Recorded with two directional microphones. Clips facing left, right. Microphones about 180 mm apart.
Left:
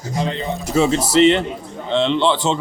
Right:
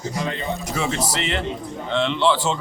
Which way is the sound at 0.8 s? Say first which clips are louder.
Left 13 dB; 25° left (ahead or behind).